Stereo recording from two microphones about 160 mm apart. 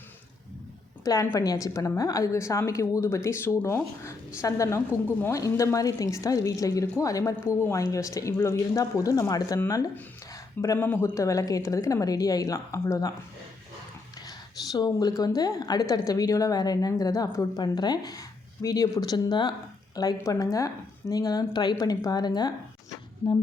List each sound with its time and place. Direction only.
1.0 s speech: 20° left (ahead or behind)
14.2 s a sound: 25° left (ahead or behind)
15.4 s speech: 25° left (ahead or behind)